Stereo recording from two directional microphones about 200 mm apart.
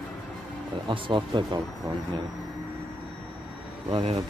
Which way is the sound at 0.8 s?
25° right (ahead or behind).